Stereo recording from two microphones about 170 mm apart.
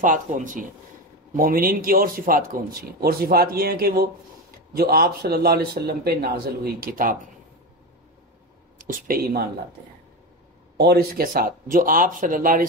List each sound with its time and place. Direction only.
0.0 s speech: 50° right (ahead or behind)
8.7 s speech: 55° right (ahead or behind)
10.8 s speech: 65° right (ahead or behind)